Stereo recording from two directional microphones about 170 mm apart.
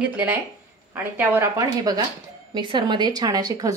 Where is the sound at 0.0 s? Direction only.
10° right (ahead or behind).